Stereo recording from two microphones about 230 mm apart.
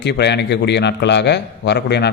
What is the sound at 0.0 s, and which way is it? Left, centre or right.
A man's voice, left.